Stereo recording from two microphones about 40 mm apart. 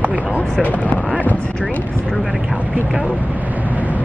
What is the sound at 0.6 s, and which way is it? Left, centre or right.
Speech, left.